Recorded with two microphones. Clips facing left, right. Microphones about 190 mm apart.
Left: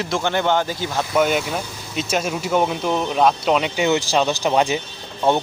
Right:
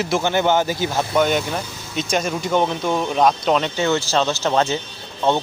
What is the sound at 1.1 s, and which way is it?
Speech, 5° left (ahead or behind).